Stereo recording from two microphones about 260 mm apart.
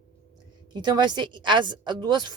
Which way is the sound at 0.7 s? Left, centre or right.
Centre.